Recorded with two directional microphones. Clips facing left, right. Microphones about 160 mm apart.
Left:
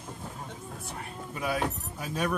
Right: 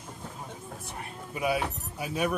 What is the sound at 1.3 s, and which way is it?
Speech, 10° right (ahead or behind).